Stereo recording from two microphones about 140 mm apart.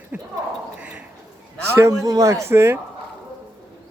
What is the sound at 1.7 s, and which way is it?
Speech, 20° right (ahead or behind).